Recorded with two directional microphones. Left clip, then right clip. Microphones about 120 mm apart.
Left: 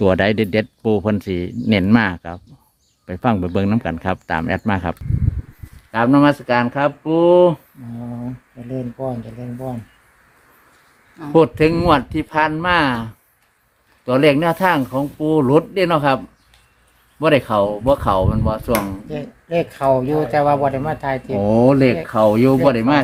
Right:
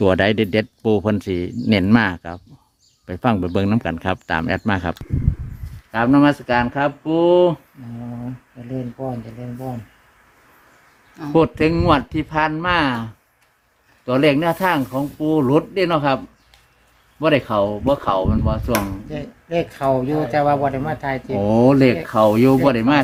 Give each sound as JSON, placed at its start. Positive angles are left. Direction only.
{"t": 0.0, "sound": "speech", "side_deg": 0}
{"t": 5.9, "sound": "speech", "side_deg": 35}
{"t": 8.7, "sound": "speech", "side_deg": 40}
{"t": 11.3, "sound": "speech", "side_deg": 40}
{"t": 21.4, "sound": "speech", "side_deg": 20}